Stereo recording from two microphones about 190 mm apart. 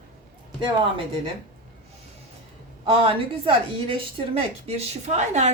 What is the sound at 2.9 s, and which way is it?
A woman's voice, 30° right (ahead or behind).